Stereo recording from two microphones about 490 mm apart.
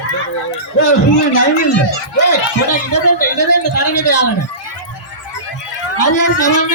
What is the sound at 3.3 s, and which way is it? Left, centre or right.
Speech, left.